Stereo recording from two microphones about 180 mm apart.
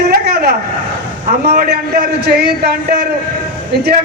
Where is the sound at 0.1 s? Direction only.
60° right (ahead or behind).